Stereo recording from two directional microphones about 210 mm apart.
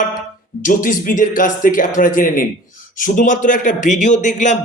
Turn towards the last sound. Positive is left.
turn(degrees=35)  # may be behind; listen again after turning